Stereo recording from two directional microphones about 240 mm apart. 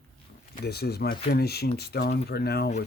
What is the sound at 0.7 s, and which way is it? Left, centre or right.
Speech, left.